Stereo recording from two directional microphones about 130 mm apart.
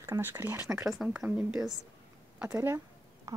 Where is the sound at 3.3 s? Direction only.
25° right (ahead or behind).